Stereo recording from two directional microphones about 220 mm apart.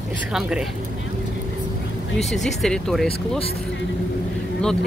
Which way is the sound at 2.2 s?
Centre (ahead or behind).